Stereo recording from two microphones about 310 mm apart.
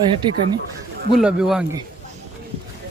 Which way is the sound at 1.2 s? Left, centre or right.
Centre.